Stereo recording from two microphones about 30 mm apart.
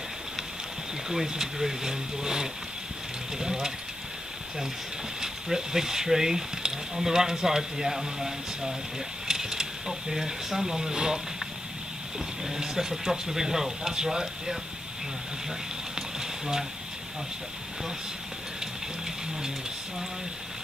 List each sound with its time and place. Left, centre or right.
1.0 s speech: centre
5.2 s speech: centre
12.4 s speech: centre
15.9 s horse: centre